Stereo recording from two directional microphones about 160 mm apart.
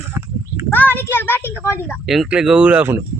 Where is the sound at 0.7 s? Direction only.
10° left (ahead or behind).